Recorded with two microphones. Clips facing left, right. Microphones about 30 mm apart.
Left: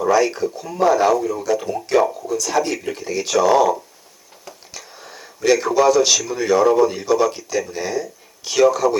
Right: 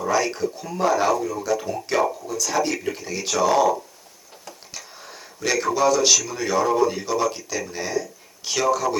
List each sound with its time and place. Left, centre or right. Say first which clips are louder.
0.1 s speech: left 4 dB; centre
4.4 s a sound: left 2 dB; centre
6.2 s speech: left 6 dB; centre